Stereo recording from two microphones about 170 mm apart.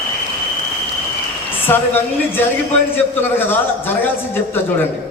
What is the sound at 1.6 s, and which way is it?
A man's voice, 10° left (ahead or behind).